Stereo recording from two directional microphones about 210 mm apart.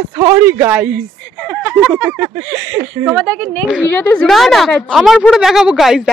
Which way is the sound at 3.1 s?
5° left (ahead or behind).